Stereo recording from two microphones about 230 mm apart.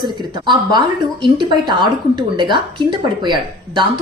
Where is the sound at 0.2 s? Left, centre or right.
Centre.